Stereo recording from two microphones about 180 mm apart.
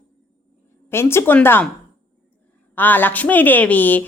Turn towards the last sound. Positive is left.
turn(degrees=10)  # may be behind; listen again after turning